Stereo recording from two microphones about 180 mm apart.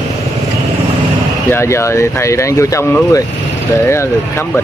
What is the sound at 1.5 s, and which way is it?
Speech, 15° left (ahead or behind).